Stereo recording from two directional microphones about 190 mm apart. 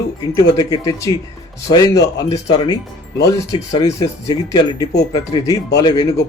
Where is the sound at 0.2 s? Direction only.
20° left (ahead or behind).